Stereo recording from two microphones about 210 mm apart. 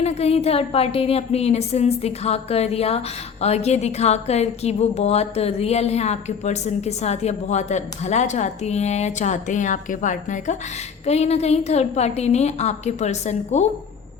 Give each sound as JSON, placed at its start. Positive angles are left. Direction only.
{"t": 0.0, "sound": "a woman's voice", "side_deg": 30}